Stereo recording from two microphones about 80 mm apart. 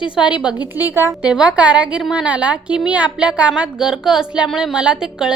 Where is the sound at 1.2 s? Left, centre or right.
Centre.